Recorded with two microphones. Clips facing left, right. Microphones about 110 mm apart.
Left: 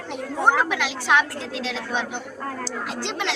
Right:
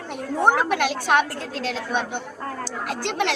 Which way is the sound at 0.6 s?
50° right (ahead or behind).